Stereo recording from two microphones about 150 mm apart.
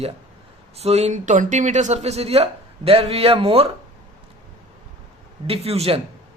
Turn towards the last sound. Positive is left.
turn(degrees=-40)  # may be behind; listen again after turning